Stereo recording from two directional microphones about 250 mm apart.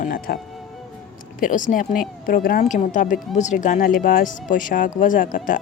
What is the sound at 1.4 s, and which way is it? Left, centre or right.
Speech, left.